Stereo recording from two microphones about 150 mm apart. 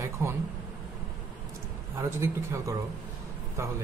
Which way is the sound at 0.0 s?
15° right (ahead or behind).